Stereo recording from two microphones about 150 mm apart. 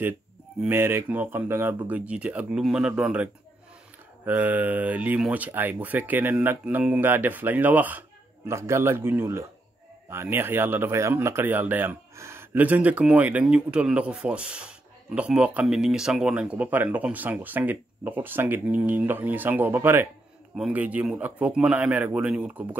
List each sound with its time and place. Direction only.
0.6 s speech: 15° right (ahead or behind)